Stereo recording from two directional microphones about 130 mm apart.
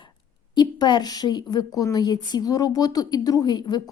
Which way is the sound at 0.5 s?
35° left (ahead or behind).